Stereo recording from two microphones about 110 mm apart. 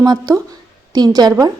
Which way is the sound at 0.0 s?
35° right (ahead or behind).